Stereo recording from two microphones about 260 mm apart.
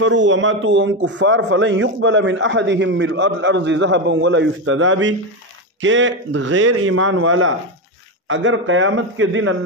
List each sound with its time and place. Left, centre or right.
0.0 s a man's voice: right